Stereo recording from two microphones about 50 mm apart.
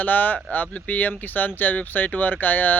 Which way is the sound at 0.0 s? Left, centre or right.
Left.